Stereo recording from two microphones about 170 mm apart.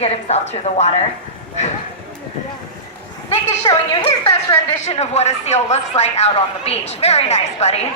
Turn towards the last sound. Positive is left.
turn(degrees=40)  # may be behind; listen again after turning